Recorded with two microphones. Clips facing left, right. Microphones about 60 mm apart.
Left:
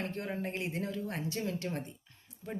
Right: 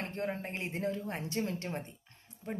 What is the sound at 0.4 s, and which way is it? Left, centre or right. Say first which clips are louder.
A woman's voice: even; right.